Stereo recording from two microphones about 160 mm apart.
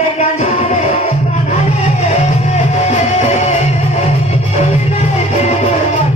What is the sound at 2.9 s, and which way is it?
Music, 45° left (ahead or behind).